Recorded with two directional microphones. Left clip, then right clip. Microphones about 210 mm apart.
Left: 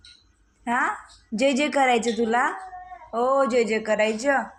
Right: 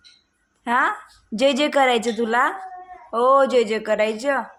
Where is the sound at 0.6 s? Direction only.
25° right (ahead or behind).